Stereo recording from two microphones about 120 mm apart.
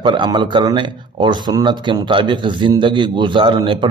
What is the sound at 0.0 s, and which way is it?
A man's voice, 40° right (ahead or behind).